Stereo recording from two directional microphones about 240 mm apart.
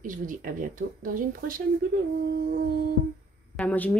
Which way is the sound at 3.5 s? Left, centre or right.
Centre.